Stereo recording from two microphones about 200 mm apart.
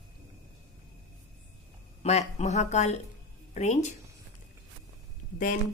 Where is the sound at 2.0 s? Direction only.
35° left (ahead or behind).